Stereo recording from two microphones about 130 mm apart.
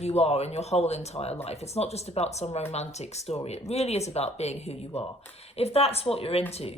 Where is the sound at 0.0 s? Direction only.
55° left (ahead or behind).